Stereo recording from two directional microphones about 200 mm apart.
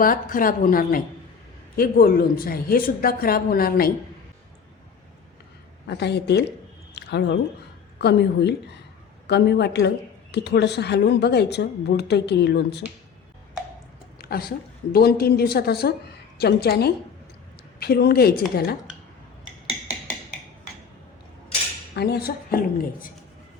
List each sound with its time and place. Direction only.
0.0 s a woman's voice: 45° left (ahead or behind)
5.9 s a woman's voice: 55° left (ahead or behind)
14.2 s a sound: 50° left (ahead or behind)
14.9 s a woman's voice: 50° left (ahead or behind)
21.9 s a woman's voice: 55° left (ahead or behind)